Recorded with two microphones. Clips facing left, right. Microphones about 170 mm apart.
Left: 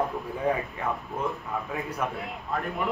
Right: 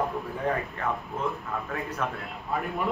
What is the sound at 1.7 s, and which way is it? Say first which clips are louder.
Speech: even; 10° left (ahead or behind).